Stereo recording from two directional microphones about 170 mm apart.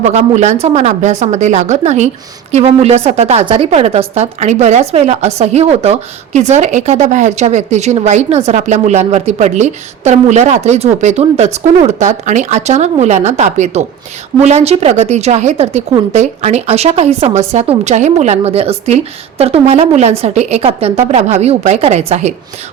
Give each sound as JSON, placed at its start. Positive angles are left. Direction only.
{"t": 0.0, "sound": "a woman's voice", "side_deg": -40}